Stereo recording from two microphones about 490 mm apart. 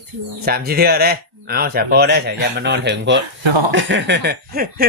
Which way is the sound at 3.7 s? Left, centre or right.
Right.